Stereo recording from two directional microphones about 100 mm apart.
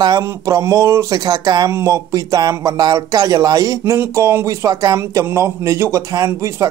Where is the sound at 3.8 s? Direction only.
25° right (ahead or behind).